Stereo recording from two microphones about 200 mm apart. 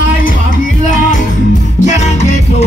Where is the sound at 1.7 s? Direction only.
35° left (ahead or behind).